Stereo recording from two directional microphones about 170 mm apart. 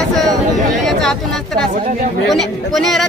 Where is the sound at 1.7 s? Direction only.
50° right (ahead or behind).